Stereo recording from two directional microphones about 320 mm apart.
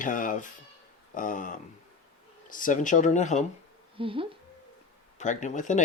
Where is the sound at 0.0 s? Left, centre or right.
Left.